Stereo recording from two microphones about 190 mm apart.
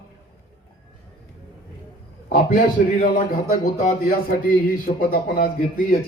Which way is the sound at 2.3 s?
50° left (ahead or behind).